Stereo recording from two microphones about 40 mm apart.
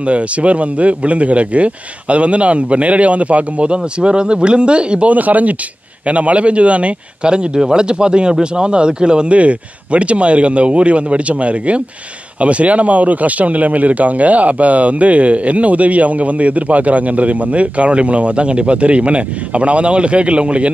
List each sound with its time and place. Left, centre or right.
0.0 s speech: right
5.1 s speech: right